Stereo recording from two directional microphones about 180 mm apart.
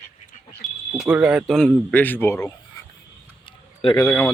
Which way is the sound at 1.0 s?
5° right (ahead or behind).